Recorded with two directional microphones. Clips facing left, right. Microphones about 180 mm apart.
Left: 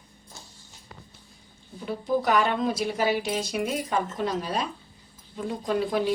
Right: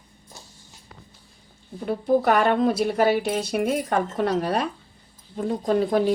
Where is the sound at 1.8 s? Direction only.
50° right (ahead or behind).